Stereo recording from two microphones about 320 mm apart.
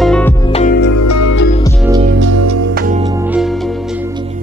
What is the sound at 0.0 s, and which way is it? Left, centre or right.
Music, centre.